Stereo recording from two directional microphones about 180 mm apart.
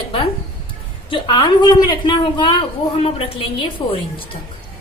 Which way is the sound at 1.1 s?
25° left (ahead or behind).